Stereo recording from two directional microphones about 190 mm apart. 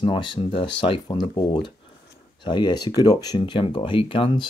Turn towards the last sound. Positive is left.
turn(degrees=25)  # may be behind; listen again after turning